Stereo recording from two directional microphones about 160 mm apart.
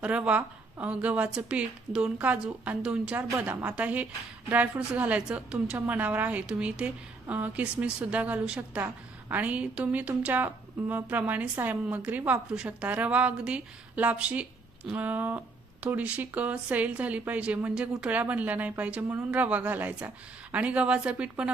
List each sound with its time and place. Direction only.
0.0 s speech: 10° right (ahead or behind)